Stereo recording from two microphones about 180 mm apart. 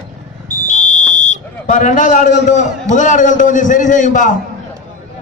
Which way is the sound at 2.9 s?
45° left (ahead or behind).